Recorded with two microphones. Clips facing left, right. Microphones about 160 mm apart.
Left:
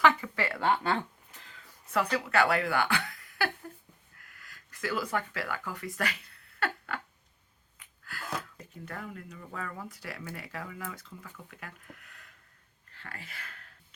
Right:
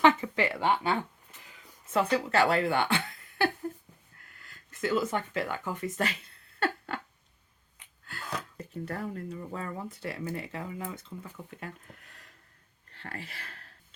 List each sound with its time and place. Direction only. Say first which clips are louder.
0.0 s speech: right 3 dB; 20° right (ahead or behind)
4.2 s a sound: even; 25° right (ahead or behind)
8.8 s speech: right 6 dB; 35° right (ahead or behind)